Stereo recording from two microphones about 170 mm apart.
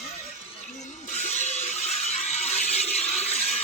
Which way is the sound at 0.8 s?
45° left (ahead or behind).